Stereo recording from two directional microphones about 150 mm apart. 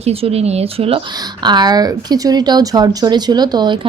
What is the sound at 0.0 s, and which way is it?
A woman's voice, 40° right (ahead or behind).